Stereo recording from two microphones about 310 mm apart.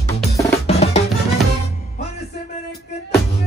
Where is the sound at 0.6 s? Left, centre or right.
Centre.